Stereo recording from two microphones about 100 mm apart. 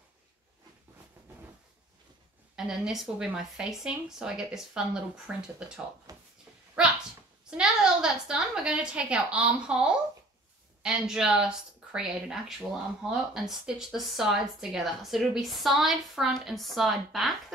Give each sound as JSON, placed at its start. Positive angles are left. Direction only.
{"t": 2.5, "sound": "a woman's voice", "side_deg": -5}
{"t": 6.1, "sound": "a sound", "side_deg": -40}
{"t": 7.4, "sound": "a woman's voice", "side_deg": -5}